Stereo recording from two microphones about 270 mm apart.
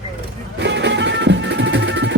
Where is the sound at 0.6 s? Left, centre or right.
Right.